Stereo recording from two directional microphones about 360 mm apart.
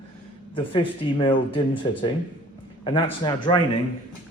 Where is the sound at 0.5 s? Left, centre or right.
Centre.